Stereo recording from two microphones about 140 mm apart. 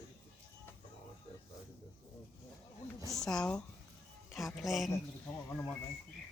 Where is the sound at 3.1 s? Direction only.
5° left (ahead or behind).